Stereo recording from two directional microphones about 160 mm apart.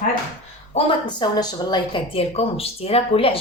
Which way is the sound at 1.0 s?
25° left (ahead or behind).